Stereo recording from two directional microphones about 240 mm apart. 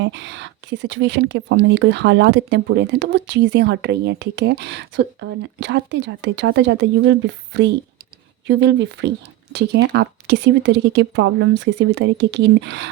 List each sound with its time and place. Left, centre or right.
0.0 s a woman's voice: right